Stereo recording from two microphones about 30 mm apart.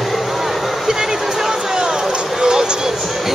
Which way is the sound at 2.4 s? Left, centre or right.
Right.